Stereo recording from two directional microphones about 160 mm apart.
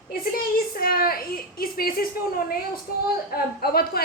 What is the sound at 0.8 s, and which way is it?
A woman's voice, 70° left (ahead or behind).